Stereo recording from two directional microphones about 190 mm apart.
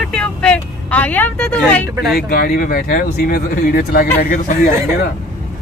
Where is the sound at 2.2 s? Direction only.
50° left (ahead or behind).